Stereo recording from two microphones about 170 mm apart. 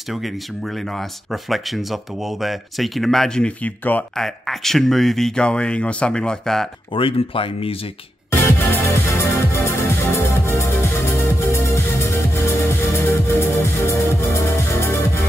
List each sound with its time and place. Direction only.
0.9 s speech: centre (ahead or behind)
6.9 s speech: 30° left (ahead or behind)
8.3 s music: 15° left (ahead or behind)